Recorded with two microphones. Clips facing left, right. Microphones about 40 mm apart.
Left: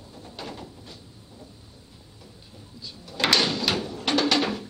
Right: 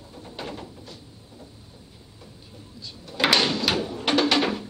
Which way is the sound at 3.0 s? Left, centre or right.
Centre.